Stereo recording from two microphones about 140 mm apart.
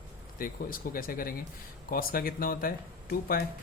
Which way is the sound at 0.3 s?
90° left.